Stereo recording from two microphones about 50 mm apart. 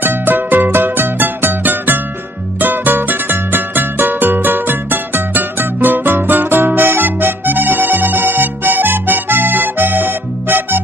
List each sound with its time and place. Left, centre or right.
0.0 s music: right